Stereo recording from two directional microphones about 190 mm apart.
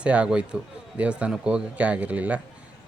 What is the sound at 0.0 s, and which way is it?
Speech, 5° right (ahead or behind).